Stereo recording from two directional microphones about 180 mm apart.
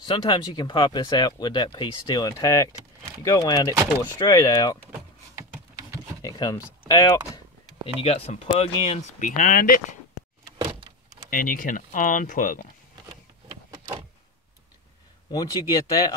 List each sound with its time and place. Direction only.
0.1 s speech: 30° left (ahead or behind)
3.7 s speech: 15° right (ahead or behind)
4.3 s speech: 20° left (ahead or behind)
4.9 s a sound: 20° right (ahead or behind)
6.2 s speech: 20° left (ahead or behind)
8.0 s speech: 35° left (ahead or behind)
9.4 s speech: 50° left (ahead or behind)
11.2 s speech: 50° left (ahead or behind)
15.3 s speech: 20° left (ahead or behind)